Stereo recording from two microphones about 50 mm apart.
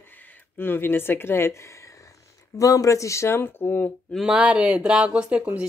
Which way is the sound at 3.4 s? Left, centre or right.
Left.